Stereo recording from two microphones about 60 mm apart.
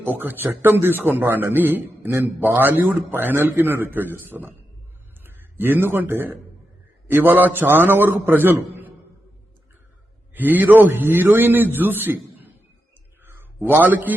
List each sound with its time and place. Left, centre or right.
0.0 s a man's voice: right
10.3 s a man's voice: right
13.7 s a man's voice: right